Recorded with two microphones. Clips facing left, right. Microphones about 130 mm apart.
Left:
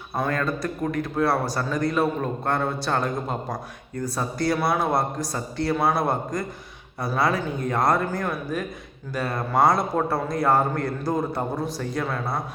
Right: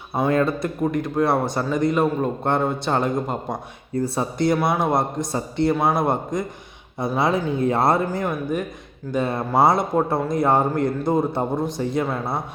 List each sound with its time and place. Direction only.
0.3 s a man's voice: 25° right (ahead or behind)
8.2 s a man's voice: 20° right (ahead or behind)